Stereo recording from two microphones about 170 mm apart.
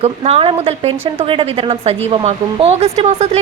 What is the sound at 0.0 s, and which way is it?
A woman's voice, 35° right (ahead or behind).